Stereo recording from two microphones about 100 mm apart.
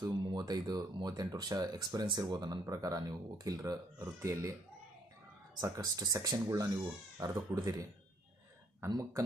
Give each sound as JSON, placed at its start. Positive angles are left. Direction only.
{"t": 0.0, "sound": "speech", "side_deg": -45}
{"t": 5.5, "sound": "speech", "side_deg": -35}
{"t": 8.9, "sound": "speech", "side_deg": -35}